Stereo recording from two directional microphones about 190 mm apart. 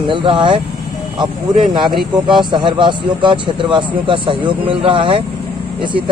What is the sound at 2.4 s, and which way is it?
A man's voice, 25° right (ahead or behind).